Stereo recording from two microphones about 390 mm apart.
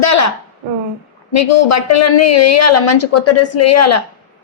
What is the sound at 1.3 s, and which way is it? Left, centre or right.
A woman's voice, left.